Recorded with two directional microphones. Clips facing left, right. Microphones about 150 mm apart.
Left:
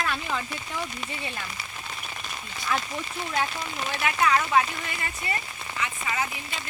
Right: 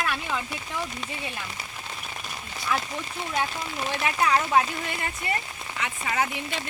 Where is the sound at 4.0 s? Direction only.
30° right (ahead or behind).